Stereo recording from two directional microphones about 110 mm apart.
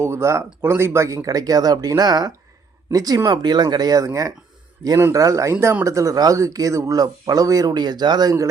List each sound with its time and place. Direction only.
0.0 s speech: 25° right (ahead or behind)